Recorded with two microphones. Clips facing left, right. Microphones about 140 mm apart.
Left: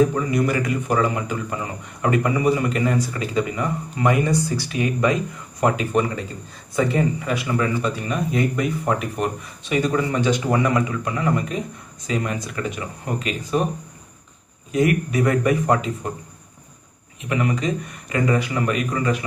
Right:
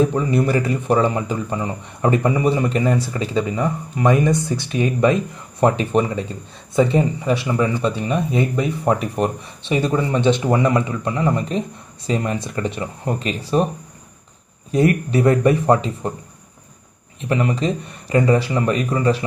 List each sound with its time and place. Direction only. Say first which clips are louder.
0.1 s speech: right 3 dB; 25° right (ahead or behind)
14.7 s speech: right 3 dB; 30° right (ahead or behind)
17.3 s speech: right 2 dB; 30° right (ahead or behind)